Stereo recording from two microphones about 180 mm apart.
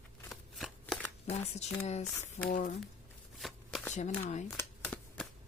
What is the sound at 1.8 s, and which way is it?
Speech, 40° left (ahead or behind).